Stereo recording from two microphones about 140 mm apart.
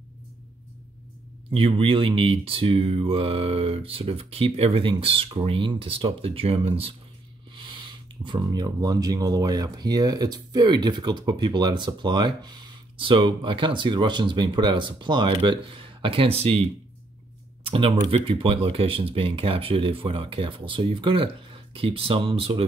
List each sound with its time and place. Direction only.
1.5 s speech: 40° right (ahead or behind)
17.6 s speech: 40° right (ahead or behind)